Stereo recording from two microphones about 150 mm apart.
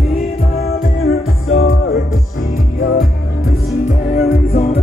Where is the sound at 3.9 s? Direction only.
45° left (ahead or behind).